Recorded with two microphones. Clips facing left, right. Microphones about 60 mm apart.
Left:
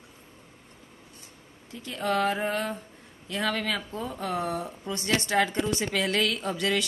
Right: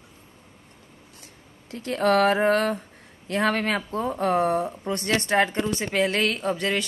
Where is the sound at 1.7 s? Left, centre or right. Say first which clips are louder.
Right 7 dB; right.